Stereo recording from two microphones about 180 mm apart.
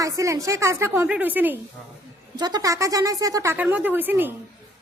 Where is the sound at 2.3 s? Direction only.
20° right (ahead or behind).